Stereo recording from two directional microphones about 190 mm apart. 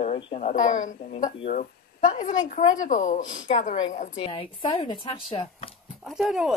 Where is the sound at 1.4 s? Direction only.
30° left (ahead or behind).